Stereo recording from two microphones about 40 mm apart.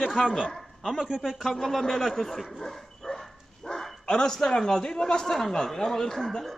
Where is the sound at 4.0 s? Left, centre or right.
Centre.